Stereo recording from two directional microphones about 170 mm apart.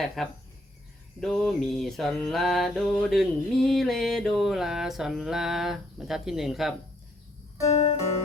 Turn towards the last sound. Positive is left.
turn(degrees=40)  # may be behind; listen again after turning